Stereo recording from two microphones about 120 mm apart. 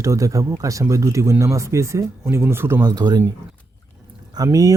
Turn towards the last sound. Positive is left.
turn(degrees=-30)  # may be behind; listen again after turning